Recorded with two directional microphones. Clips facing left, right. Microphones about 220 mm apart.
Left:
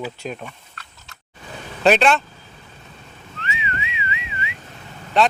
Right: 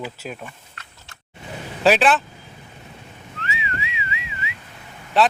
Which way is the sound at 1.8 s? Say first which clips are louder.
Left 1 dB; 5° right (ahead or behind).